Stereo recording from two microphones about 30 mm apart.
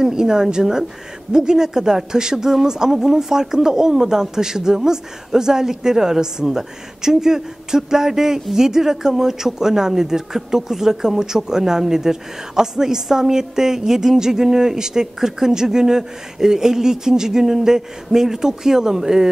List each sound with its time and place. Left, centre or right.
0.0 s a woman's voice: centre